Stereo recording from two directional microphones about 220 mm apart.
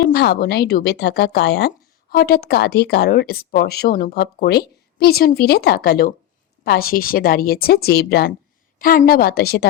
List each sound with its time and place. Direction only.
0.1 s speech: 45° left (ahead or behind)